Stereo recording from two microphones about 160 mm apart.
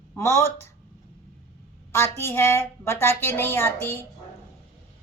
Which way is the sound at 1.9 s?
15° left (ahead or behind).